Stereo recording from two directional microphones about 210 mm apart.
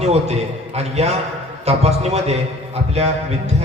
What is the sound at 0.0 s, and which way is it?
A man's voice, 30° right (ahead or behind).